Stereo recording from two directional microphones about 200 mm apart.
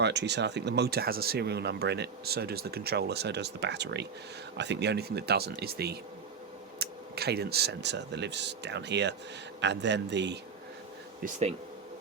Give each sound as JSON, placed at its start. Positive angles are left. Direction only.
{"t": 0.0, "sound": "speech", "side_deg": -60}
{"t": 11.2, "sound": "speech", "side_deg": -35}